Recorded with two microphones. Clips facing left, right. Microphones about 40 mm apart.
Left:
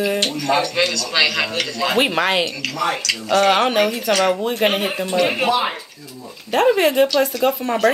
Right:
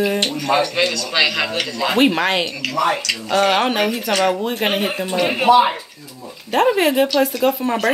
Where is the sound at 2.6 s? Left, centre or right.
Right.